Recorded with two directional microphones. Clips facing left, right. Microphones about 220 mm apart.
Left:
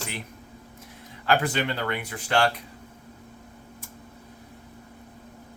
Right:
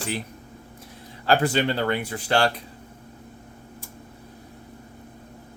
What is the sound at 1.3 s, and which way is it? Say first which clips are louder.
Speech: right 3 dB; 35° right (ahead or behind).